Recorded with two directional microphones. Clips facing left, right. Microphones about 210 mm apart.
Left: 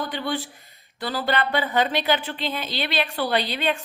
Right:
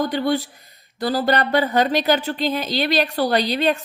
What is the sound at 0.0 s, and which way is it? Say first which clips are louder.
Speech: right 7 dB; 40° right (ahead or behind).